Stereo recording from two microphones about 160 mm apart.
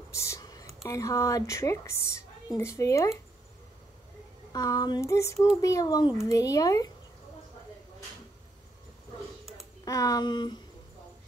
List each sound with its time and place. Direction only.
0.1 s a sound: 15° left (ahead or behind)
0.8 s a woman's voice: 20° left (ahead or behind)
4.5 s a woman's voice: 25° left (ahead or behind)
9.8 s a woman's voice: 20° left (ahead or behind)